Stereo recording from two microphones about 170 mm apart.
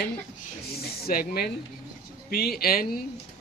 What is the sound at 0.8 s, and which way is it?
Snake, 65° left (ahead or behind).